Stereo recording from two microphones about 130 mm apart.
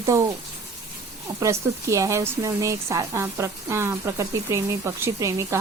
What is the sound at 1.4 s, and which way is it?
Speech, 25° right (ahead or behind).